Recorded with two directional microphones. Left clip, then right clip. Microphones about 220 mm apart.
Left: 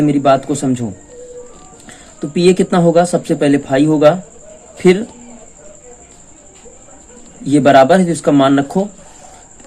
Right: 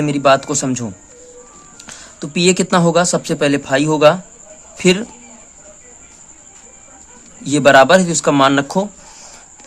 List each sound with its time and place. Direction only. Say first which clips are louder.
0.0 s a man's voice: left 1 dB; 30° right (ahead or behind)
2.3 s a man's voice: left 2 dB; 25° right (ahead or behind)
7.4 s a man's voice: left 1 dB; 25° right (ahead or behind)